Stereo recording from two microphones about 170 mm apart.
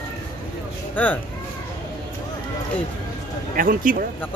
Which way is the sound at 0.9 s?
10° left (ahead or behind).